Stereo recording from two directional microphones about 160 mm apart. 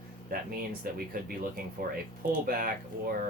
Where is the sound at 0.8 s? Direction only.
65° right (ahead or behind).